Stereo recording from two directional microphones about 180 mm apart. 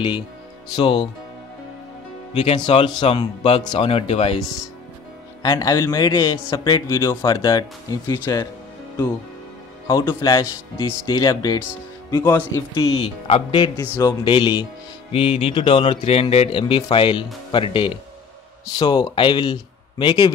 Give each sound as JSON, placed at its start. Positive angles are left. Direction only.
{"t": 0.7, "sound": "speech", "side_deg": 25}
{"t": 2.3, "sound": "speech", "side_deg": 30}
{"t": 5.4, "sound": "speech", "side_deg": 20}
{"t": 9.8, "sound": "speech", "side_deg": 15}
{"t": 12.8, "sound": "speech", "side_deg": 35}
{"t": 13.7, "sound": "speech", "side_deg": 20}